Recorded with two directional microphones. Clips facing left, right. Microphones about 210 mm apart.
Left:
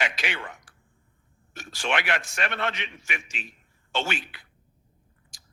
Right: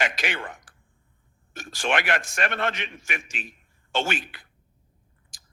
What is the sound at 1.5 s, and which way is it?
A man's voice, 50° right (ahead or behind).